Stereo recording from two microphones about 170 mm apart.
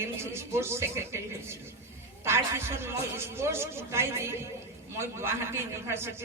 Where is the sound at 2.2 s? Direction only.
15° right (ahead or behind).